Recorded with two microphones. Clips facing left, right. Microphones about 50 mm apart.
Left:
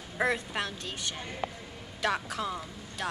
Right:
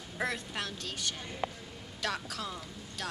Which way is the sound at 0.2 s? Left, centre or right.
Left.